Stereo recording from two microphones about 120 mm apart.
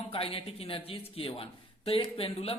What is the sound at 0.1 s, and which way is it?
Speech, 50° left (ahead or behind).